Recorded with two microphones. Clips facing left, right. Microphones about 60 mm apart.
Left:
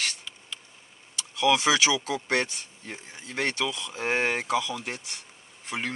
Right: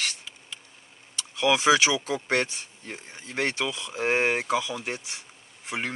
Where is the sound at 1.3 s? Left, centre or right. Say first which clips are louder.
Right 2 dB; centre.